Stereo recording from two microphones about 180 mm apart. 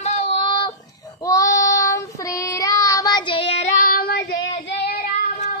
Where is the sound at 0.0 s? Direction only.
35° left (ahead or behind).